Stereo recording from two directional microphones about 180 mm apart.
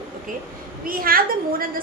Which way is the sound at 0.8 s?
55° right (ahead or behind).